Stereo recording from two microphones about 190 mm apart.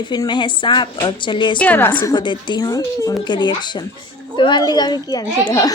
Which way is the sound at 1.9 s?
25° left (ahead or behind).